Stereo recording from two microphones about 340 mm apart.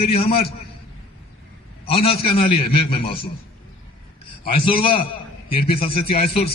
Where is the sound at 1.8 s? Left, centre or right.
Centre.